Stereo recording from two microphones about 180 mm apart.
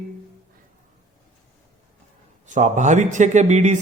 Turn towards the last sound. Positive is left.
turn(degrees=-40)  # may be behind; listen again after turning